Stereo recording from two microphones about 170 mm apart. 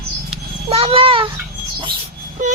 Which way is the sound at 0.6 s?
35° right (ahead or behind).